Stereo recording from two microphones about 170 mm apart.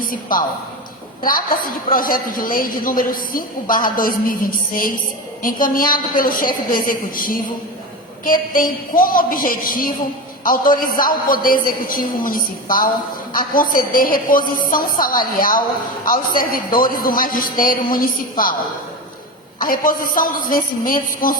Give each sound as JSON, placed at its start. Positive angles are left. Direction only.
{"t": 0.0, "sound": "a woman's voice", "side_deg": 55}
{"t": 19.5, "sound": "a woman's voice", "side_deg": 55}